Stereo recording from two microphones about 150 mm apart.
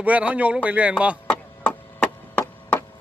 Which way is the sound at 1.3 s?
10° left (ahead or behind).